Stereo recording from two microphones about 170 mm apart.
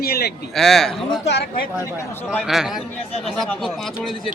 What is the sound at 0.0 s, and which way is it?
Speech, 70° left (ahead or behind).